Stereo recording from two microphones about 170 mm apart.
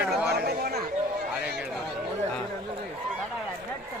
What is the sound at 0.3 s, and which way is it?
Chatter, 70° right (ahead or behind).